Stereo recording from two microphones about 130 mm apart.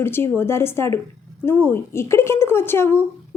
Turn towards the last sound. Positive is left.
turn(degrees=20)  # may be behind; listen again after turning